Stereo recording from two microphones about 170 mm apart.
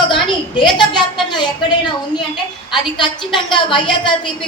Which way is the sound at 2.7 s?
30° left (ahead or behind).